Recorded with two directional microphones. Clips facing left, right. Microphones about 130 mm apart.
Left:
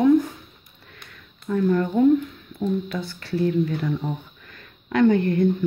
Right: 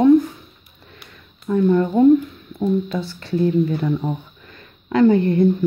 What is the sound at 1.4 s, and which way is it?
Speech, 25° right (ahead or behind).